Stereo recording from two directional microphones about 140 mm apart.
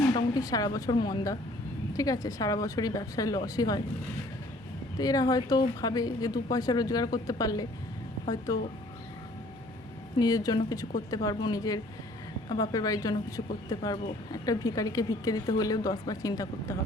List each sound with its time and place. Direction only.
0.1 s a woman's voice: 30° left (ahead or behind)
4.9 s a woman's voice: 25° left (ahead or behind)
10.2 s a woman's voice: 25° left (ahead or behind)